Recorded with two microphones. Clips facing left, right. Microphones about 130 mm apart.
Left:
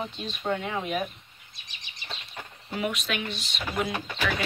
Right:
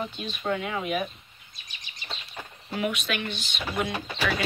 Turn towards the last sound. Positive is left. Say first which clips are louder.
# even
turn(degrees=-30)  # may be behind; listen again after turning